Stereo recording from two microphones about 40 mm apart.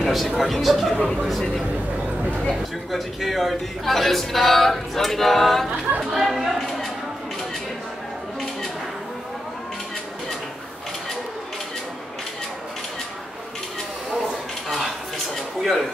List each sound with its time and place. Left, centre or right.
0.0 s a man's voice: centre
2.5 s a man's voice: centre
5.7 s speech: right
6.0 s a man's voice: centre
6.6 s a sound: centre
15.6 s speech: centre